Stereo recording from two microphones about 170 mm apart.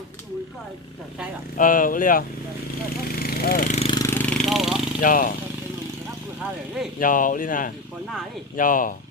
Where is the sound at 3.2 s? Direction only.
60° left (ahead or behind).